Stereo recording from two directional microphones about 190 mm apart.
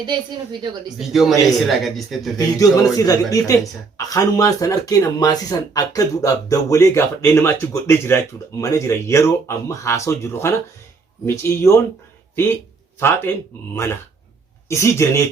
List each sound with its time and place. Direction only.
0.0 s a woman's voice: 25° right (ahead or behind)
0.9 s a man's voice: centre (ahead or behind)
2.6 s speech: 20° left (ahead or behind)
13.0 s speech: 10° left (ahead or behind)